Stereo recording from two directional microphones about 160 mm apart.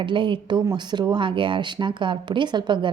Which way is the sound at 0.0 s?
30° right (ahead or behind).